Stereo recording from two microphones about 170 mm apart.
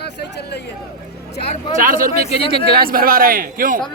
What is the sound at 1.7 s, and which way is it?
A man's voice, 55° right (ahead or behind).